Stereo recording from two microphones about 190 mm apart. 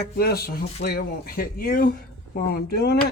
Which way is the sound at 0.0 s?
55° left (ahead or behind).